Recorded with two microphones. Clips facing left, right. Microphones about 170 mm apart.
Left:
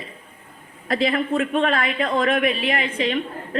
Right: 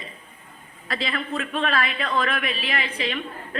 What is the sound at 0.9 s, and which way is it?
A woman's voice, 50° left (ahead or behind).